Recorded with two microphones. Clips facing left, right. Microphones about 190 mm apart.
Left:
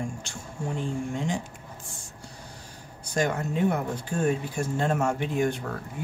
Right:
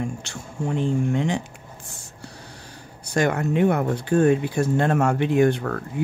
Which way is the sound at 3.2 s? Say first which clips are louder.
Right 5 dB; 75° right (ahead or behind).